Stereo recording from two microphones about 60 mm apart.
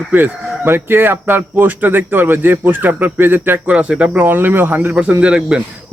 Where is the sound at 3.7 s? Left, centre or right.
Right.